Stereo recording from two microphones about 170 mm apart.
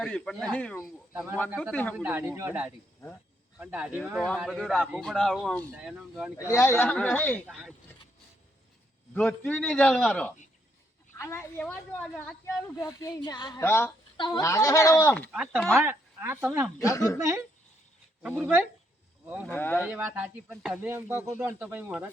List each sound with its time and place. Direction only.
0.0 s a woman's voice: 5° left (ahead or behind)
2.0 s speech: 10° right (ahead or behind)
6.3 s a woman's voice: 15° left (ahead or behind); by 7.7 s centre (ahead or behind)
9.1 s a woman's voice: 10° left (ahead or behind)
14.2 s a woman's voice: 25° left (ahead or behind)
15.3 s speech: 5° right (ahead or behind)
16.8 s a woman's voice: 20° left (ahead or behind)
17.2 s speech: 15° right (ahead or behind)
19.5 s a woman's voice: 10° left (ahead or behind)
19.8 s speech: 10° right (ahead or behind)